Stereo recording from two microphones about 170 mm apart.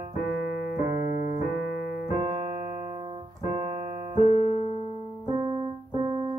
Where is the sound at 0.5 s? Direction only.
65° left (ahead or behind).